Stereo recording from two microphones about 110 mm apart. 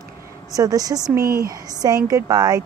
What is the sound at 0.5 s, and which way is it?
Speech, 30° right (ahead or behind).